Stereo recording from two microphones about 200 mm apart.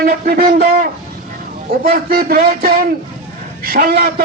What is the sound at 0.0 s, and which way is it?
A man's voice, 50° right (ahead or behind).